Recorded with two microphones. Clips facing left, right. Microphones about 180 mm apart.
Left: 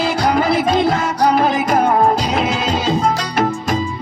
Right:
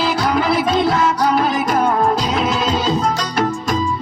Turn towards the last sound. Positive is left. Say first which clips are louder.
# left 1 dB
turn(degrees=50)  # may be behind; listen again after turning